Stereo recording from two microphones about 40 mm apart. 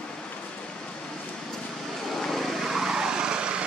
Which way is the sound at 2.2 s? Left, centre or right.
Centre.